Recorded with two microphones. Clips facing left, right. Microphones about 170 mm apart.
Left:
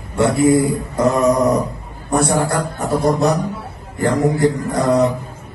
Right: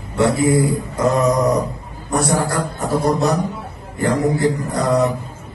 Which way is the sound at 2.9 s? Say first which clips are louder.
Left 1 dB; 20° left (ahead or behind).